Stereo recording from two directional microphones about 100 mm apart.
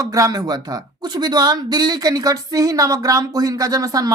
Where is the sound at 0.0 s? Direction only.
35° right (ahead or behind).